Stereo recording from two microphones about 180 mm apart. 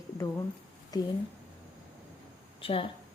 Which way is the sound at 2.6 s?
30° left (ahead or behind).